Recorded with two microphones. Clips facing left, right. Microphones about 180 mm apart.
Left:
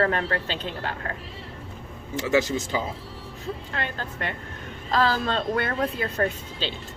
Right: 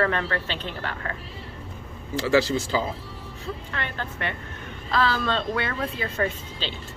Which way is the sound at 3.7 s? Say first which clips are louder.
Left 1 dB; 40° left (ahead or behind).